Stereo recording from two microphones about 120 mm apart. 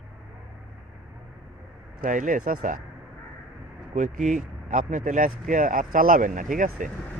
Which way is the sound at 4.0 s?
90° right.